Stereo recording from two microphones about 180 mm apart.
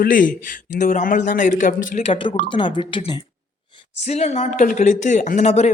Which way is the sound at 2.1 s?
25° left (ahead or behind).